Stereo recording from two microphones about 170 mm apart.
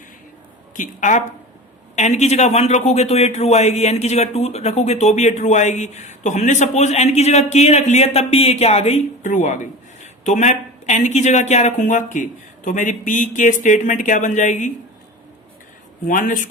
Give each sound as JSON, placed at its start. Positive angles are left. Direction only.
{"t": 0.8, "sound": "a man's voice", "side_deg": 50}
{"t": 16.0, "sound": "a man's voice", "side_deg": 50}